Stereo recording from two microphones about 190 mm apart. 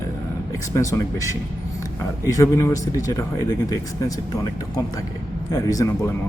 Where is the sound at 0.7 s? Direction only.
15° left (ahead or behind).